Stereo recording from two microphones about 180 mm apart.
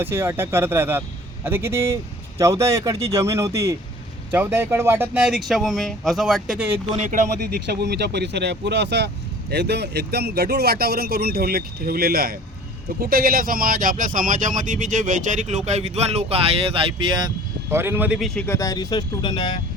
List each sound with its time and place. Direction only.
0.0 s speech: 15° right (ahead or behind)
7.7 s speech: 65° right (ahead or behind); by 17.2 s 30° right (ahead or behind)
17.7 s speech: 15° right (ahead or behind)
18.4 s speech: 15° left (ahead or behind)